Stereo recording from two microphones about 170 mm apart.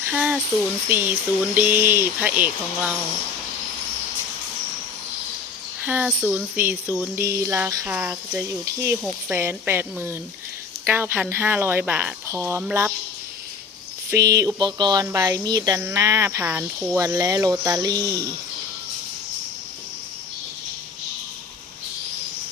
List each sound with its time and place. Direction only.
0.1 s speech: 5° right (ahead or behind)
5.8 s speech: 10° right (ahead or behind)
14.1 s speech: 20° right (ahead or behind)